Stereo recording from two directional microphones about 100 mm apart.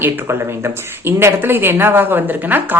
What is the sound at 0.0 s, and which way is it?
Speech, 25° right (ahead or behind).